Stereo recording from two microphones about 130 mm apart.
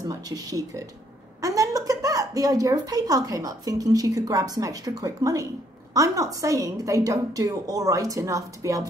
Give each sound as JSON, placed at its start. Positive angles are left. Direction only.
{"t": 0.0, "sound": "a woman's voice", "side_deg": -30}